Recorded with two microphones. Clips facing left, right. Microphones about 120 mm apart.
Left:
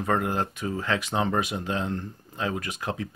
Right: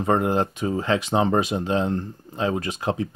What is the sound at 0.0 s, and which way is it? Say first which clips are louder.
Speech: right 5 dB; 25° right (ahead or behind).